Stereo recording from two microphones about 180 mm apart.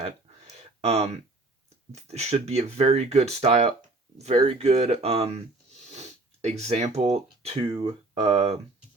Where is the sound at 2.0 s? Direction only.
40° right (ahead or behind).